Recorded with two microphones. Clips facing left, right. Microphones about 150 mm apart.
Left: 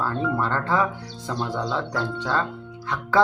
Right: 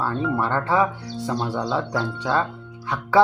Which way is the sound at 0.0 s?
5° right (ahead or behind).